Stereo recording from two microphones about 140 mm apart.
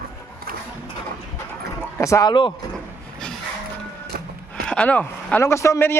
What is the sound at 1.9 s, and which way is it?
Speech, 20° left (ahead or behind).